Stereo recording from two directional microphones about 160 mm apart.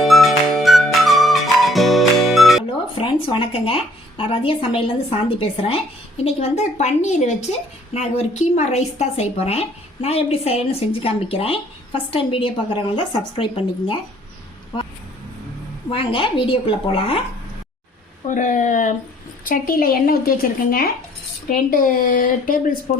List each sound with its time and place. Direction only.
0.0 s music: centre (ahead or behind)
3.0 s a woman's voice: 30° left (ahead or behind)
15.9 s a woman's voice: 35° left (ahead or behind)
18.3 s a woman's voice: 55° left (ahead or behind)
19.5 s a woman's voice: 65° left (ahead or behind)